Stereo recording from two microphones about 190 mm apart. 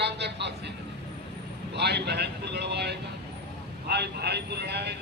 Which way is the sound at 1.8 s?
60° right (ahead or behind).